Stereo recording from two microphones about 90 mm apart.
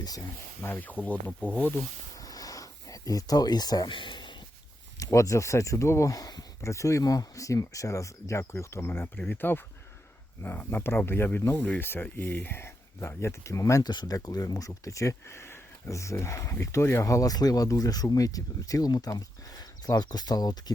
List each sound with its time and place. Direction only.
0.2 s speech: 25° left (ahead or behind)
2.2 s a sound: 45° left (ahead or behind)
3.9 s speech: 60° left (ahead or behind)
4.9 s speech: 35° left (ahead or behind)
13.9 s speech: 50° left (ahead or behind)